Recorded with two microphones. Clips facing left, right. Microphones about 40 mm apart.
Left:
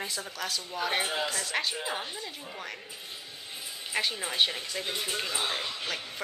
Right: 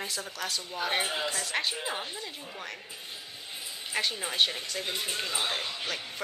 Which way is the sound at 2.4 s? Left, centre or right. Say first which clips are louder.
Even; centre.